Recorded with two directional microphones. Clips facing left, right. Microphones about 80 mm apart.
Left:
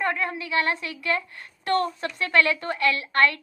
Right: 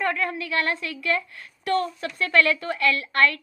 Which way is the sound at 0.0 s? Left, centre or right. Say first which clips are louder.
Right 1 dB; left.